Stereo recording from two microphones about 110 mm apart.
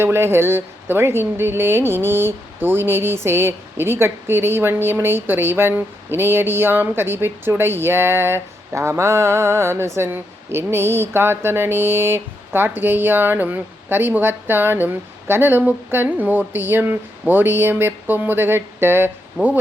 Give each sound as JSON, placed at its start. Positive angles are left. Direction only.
{"t": 0.0, "sound": "speech", "side_deg": -20}